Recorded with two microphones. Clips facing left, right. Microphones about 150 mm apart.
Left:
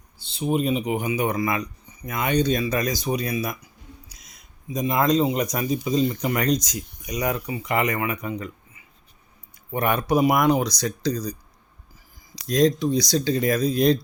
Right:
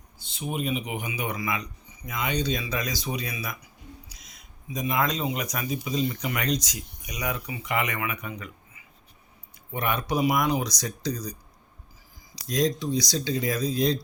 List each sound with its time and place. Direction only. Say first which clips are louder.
0.2 s speech: left 8 dB; 30° left (ahead or behind)
4.7 s speech: left 6 dB; 40° left (ahead or behind)
9.7 s speech: left 6 dB; 50° left (ahead or behind)
12.4 s speech: left 6 dB; 60° left (ahead or behind)